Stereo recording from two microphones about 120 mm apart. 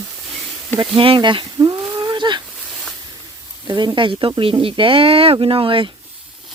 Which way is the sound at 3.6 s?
40° right (ahead or behind).